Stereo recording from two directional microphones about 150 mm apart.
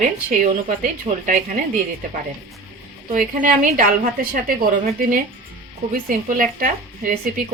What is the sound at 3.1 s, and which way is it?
A woman's voice, 65° right (ahead or behind).